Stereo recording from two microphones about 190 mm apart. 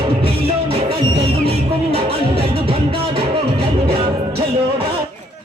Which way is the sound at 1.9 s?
30° right (ahead or behind).